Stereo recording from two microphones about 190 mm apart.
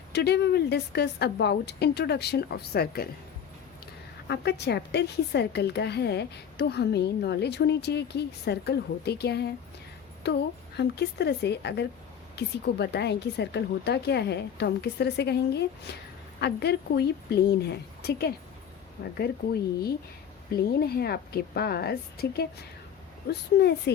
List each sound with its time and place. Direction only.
0.1 s a woman's voice: 60° left (ahead or behind)
4.3 s a woman's voice: 60° left (ahead or behind)
20.5 s a woman's voice: 55° left (ahead or behind)